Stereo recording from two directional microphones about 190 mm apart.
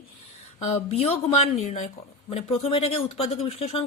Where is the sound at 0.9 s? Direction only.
35° left (ahead or behind).